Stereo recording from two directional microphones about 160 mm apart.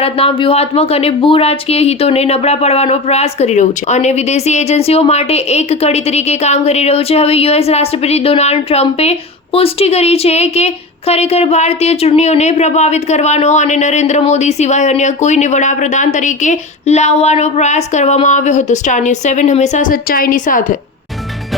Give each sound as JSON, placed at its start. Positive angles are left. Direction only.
{"t": 0.0, "sound": "speech", "side_deg": 35}